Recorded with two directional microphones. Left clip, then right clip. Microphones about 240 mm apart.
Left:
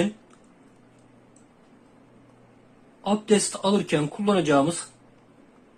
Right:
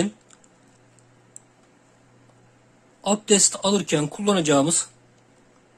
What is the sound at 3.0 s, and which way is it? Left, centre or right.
Speech, right.